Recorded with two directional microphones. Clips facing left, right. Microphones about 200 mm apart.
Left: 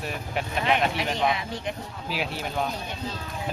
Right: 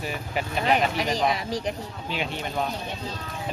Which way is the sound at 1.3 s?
35° right (ahead or behind).